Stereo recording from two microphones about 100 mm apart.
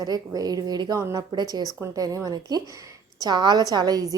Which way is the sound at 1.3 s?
45° right (ahead or behind).